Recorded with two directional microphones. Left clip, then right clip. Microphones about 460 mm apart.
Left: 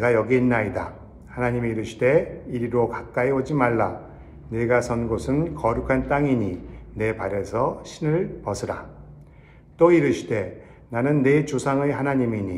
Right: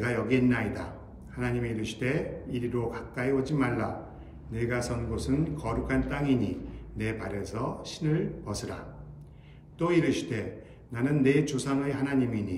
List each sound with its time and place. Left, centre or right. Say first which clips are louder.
0.0 s a man's voice: left 8 dB; centre
4.5 s a man's voice: left 11 dB; centre
4.8 s speech: left 8 dB; centre
5.7 s a man's voice: left 10 dB; centre
9.8 s a man's voice: left 10 dB; centre